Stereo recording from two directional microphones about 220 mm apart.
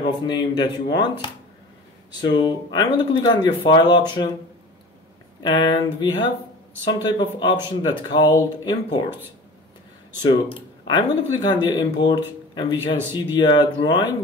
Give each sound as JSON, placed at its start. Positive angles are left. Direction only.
{"t": 0.0, "sound": "speech", "side_deg": 20}
{"t": 5.4, "sound": "speech", "side_deg": 20}
{"t": 10.2, "sound": "speech", "side_deg": 20}